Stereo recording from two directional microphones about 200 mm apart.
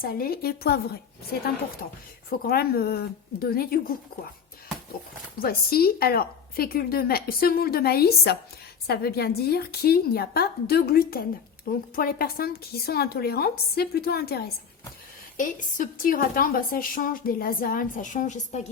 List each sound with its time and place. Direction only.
0.0 s a woman's voice: 50° left (ahead or behind)
5.4 s a woman's voice: 50° left (ahead or behind)